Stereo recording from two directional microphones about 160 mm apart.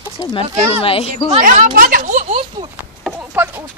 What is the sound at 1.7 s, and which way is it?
Speech, 60° right (ahead or behind).